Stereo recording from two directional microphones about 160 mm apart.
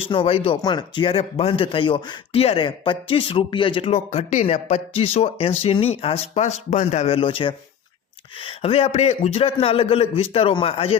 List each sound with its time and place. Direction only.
0.1 s speech: 35° left (ahead or behind)